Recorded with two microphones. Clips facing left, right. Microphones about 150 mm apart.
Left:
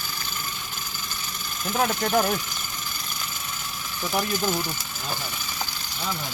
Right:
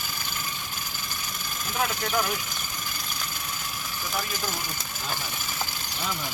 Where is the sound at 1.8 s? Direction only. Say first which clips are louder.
Left 5 dB; 45° left (ahead or behind).